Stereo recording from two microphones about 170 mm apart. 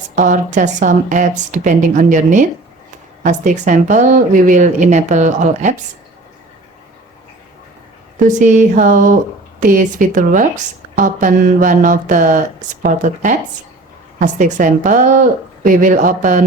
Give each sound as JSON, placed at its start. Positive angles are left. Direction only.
{"t": 0.2, "sound": "speech", "side_deg": -45}
{"t": 8.2, "sound": "speech", "side_deg": -45}